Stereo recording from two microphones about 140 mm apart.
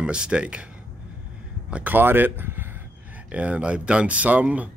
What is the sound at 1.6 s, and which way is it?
Speech, 10° right (ahead or behind).